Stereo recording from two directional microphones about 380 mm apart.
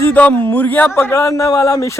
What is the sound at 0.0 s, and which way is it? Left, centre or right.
Speech, centre.